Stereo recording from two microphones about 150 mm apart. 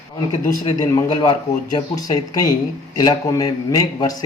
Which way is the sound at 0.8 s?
30° left (ahead or behind).